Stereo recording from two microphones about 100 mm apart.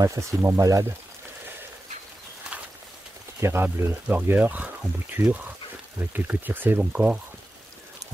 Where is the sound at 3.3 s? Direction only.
25° right (ahead or behind).